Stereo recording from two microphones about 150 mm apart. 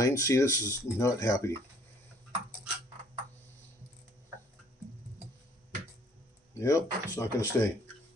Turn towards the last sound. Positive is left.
turn(degrees=20)  # may be behind; listen again after turning